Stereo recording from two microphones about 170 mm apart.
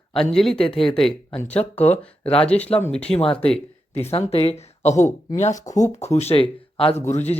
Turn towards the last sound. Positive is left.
turn(degrees=40)  # may be behind; listen again after turning